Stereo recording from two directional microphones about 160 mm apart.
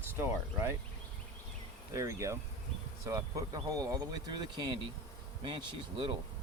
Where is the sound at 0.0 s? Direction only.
15° right (ahead or behind).